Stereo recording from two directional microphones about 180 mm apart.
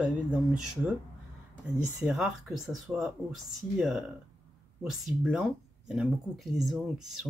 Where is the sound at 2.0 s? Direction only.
Centre (ahead or behind).